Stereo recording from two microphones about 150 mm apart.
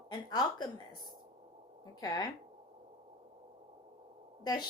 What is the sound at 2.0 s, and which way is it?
Speech, 25° left (ahead or behind).